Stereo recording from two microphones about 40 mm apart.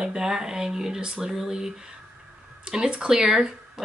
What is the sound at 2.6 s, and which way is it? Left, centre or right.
Speech, centre.